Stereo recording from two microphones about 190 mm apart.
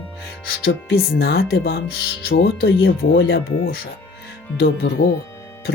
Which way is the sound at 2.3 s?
85° left.